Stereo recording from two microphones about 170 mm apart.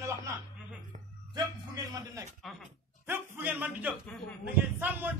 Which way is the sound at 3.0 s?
15° right (ahead or behind).